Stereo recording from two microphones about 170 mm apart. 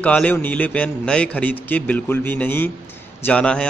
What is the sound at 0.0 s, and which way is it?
A man's voice, 10° left (ahead or behind).